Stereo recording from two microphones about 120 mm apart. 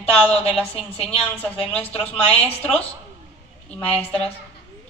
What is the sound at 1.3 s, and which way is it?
A man's voice, 15° left (ahead or behind).